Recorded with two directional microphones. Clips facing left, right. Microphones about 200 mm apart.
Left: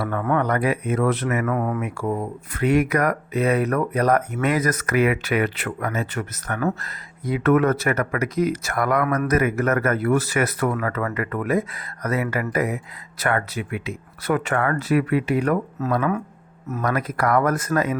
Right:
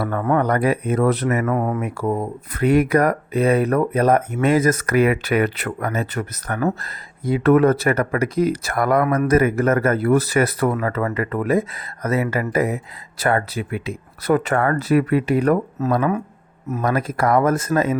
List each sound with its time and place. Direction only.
0.0 s speech: 35° right (ahead or behind)